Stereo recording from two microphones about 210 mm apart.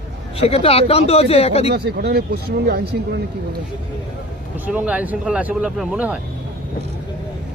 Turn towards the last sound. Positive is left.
turn(degrees=-5)  # may be behind; listen again after turning